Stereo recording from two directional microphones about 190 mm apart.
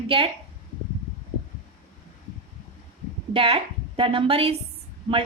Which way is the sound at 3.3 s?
30° right (ahead or behind).